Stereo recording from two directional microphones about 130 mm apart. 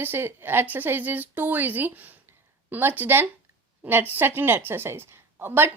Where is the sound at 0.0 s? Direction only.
15° right (ahead or behind).